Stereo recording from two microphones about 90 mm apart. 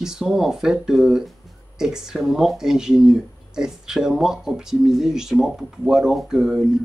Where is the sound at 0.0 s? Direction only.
5° right (ahead or behind).